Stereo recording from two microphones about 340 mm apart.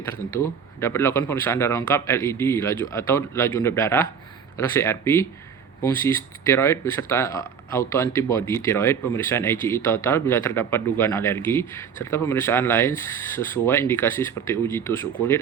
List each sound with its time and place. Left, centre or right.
0.0 s speech: centre